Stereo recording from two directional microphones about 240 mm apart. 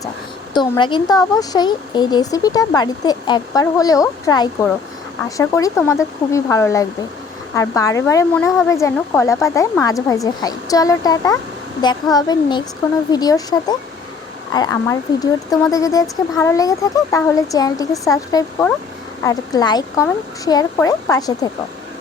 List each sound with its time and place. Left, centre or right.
0.5 s speech: centre